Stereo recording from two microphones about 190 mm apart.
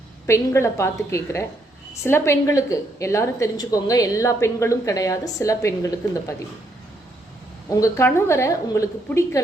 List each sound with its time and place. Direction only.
0.3 s a woman's voice: 15° left (ahead or behind)
7.7 s a woman's voice: 15° left (ahead or behind)